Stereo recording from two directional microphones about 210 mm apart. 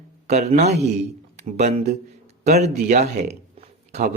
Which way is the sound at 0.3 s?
30° right (ahead or behind).